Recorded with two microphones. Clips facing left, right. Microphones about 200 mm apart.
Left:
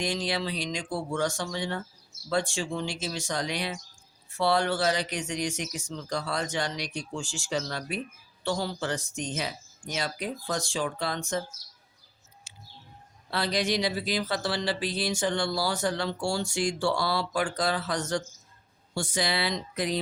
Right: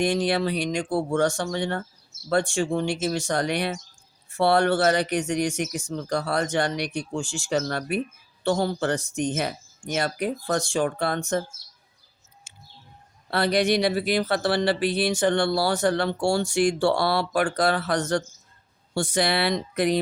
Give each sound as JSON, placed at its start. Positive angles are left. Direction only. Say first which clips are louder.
{"t": 0.0, "sound": "speech", "louder": "right 7 dB", "side_deg": -60}
{"t": 7.3, "sound": "speech", "louder": "right 6 dB", "side_deg": -50}
{"t": 13.3, "sound": "speech", "louder": "right 6 dB", "side_deg": -60}